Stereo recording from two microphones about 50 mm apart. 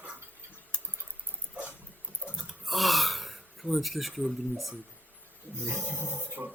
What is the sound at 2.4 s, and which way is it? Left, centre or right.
Gasp, centre.